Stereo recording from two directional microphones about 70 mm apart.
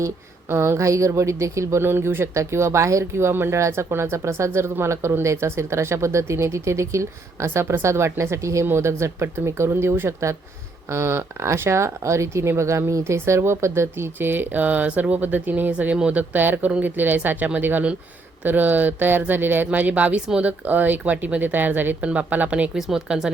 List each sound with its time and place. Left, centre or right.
0.5 s speech: right
1.8 s speech: right; by 20.5 s centre
20.7 s speech: right; by 23.3 s centre